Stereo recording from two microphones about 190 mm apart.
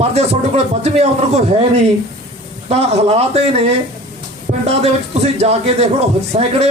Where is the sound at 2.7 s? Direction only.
30° right (ahead or behind).